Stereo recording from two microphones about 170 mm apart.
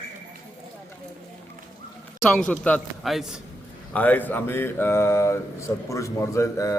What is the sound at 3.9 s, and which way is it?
A man's voice, 10° left (ahead or behind).